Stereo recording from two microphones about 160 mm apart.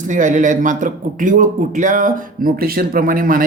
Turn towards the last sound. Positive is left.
turn(degrees=-60)  # may be behind; listen again after turning